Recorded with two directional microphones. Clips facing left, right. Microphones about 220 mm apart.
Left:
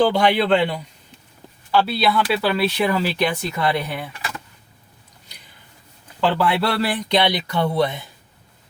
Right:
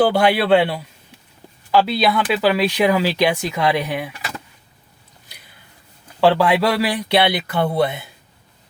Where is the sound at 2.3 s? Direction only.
15° right (ahead or behind).